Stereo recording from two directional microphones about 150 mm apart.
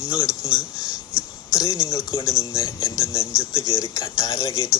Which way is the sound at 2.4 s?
20° left (ahead or behind).